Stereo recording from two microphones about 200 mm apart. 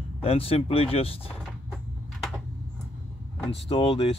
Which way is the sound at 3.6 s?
30° left (ahead or behind).